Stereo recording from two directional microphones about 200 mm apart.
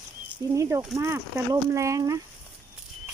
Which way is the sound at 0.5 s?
15° right (ahead or behind).